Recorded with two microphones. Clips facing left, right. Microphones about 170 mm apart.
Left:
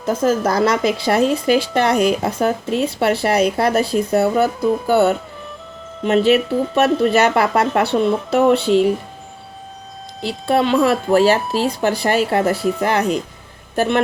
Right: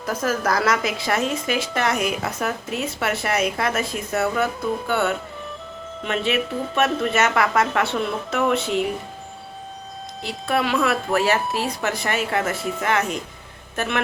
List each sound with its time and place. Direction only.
0.0 s a woman's voice: 25° left (ahead or behind)
10.4 s speech: 25° left (ahead or behind)